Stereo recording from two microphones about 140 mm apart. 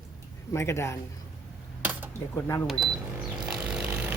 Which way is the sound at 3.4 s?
5° right (ahead or behind).